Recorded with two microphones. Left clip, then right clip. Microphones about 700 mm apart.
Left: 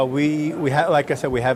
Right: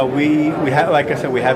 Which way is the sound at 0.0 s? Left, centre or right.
Left.